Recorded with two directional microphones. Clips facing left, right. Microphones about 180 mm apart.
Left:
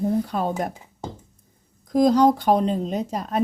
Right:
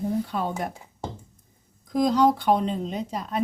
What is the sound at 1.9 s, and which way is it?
Speech, 40° left (ahead or behind).